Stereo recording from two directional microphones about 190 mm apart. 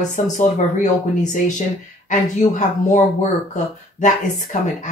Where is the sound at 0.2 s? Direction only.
40° left (ahead or behind).